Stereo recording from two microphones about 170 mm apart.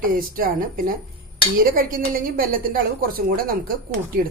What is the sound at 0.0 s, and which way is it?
Speech, 55° right (ahead or behind).